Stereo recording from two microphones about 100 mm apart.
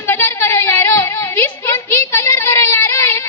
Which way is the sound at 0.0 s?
20° left (ahead or behind).